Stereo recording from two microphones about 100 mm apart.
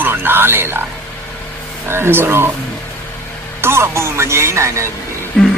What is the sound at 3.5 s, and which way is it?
Speech, 25° right (ahead or behind).